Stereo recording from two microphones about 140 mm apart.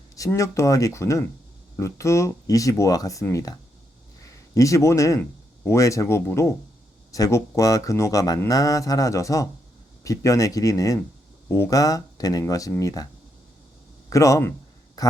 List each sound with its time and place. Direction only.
0.2 s speech: 25° left (ahead or behind)
14.1 s speech: 25° left (ahead or behind)